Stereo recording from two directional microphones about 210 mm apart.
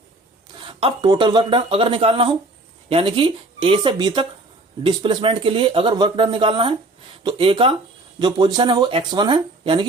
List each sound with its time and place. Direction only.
0.6 s speech: 25° right (ahead or behind)